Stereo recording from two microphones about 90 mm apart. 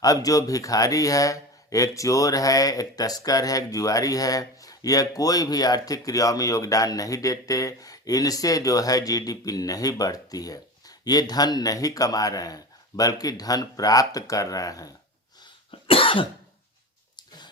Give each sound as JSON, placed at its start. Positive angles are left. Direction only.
{"t": 0.0, "sound": "a man's voice", "side_deg": 40}
{"t": 15.9, "sound": "cough", "side_deg": 85}
{"t": 17.2, "sound": "a sound", "side_deg": 55}